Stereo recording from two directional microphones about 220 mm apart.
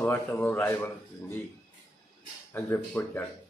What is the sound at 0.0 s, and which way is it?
Speech, 10° left (ahead or behind).